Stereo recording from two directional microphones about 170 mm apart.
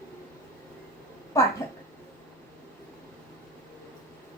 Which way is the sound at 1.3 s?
20° left (ahead or behind).